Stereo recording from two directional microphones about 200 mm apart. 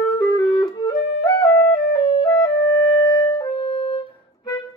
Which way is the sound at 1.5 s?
55° left (ahead or behind).